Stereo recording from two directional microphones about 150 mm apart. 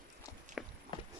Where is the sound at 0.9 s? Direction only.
30° left (ahead or behind).